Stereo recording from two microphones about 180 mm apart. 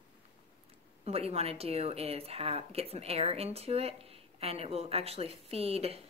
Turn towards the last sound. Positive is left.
turn(degrees=-35)  # may be behind; listen again after turning